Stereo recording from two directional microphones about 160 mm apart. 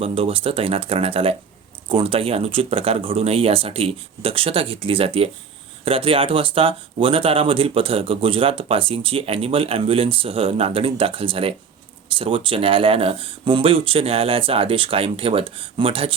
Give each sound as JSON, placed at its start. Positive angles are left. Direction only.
{"t": 0.0, "sound": "speech", "side_deg": -35}